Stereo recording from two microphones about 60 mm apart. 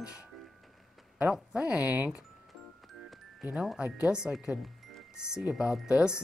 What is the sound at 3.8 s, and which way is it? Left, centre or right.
A woman's voice, centre.